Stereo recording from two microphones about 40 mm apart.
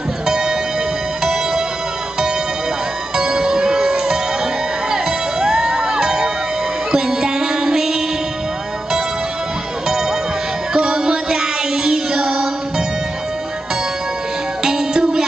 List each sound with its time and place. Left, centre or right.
0.3 s music: centre
3.2 s music: centre
10.7 s music: right
14.6 s music: centre